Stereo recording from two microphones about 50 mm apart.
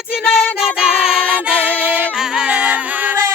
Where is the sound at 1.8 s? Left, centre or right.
Right.